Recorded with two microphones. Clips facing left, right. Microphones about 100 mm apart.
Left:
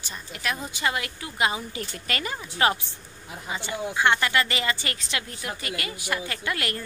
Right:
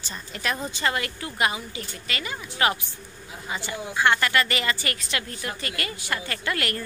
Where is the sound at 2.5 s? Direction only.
30° left (ahead or behind).